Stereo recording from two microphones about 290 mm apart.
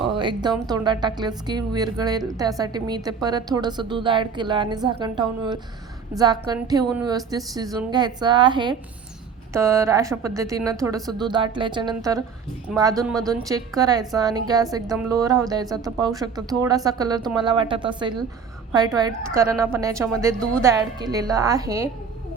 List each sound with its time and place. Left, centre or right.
0.1 s music: centre
0.7 s a woman's voice: centre